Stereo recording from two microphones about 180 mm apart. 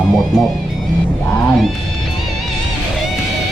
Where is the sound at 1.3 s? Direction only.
10° left (ahead or behind).